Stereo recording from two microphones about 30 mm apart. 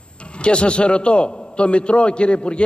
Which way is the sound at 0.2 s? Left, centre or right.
Left.